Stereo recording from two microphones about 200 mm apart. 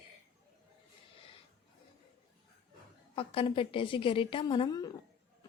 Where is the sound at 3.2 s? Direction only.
25° left (ahead or behind).